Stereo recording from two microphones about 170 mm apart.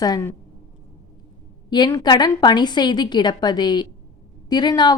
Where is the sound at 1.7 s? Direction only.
25° left (ahead or behind).